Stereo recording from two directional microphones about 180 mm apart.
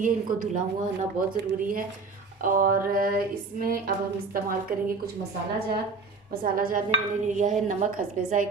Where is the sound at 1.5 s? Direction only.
50° right (ahead or behind).